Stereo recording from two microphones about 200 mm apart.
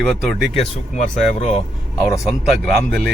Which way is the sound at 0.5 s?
35° left (ahead or behind).